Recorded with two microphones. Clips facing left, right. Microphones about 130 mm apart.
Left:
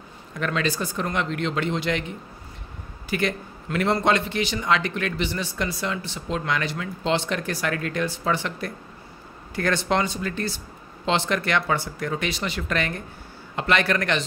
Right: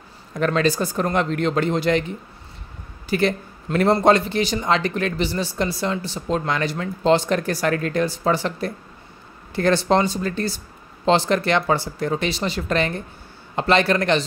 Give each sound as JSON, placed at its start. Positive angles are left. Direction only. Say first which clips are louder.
{"t": 0.4, "sound": "speech", "louder": "right 6 dB", "side_deg": -40}